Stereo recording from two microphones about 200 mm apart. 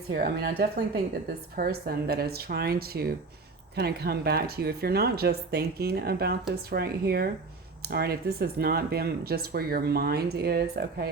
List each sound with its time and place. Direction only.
0.1 s speech: 45° right (ahead or behind)